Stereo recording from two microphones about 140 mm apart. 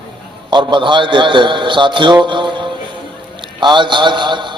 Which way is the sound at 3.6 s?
35° right (ahead or behind).